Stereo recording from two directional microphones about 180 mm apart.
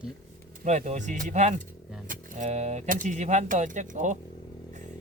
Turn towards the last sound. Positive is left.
turn(degrees=-45)  # may be behind; listen again after turning